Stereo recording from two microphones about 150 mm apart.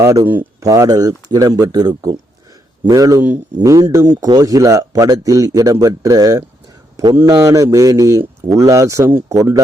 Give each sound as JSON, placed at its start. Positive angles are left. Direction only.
{"t": 0.6, "sound": "a man's voice", "side_deg": -25}